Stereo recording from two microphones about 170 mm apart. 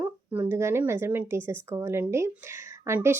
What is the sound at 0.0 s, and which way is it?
Speech, 15° right (ahead or behind).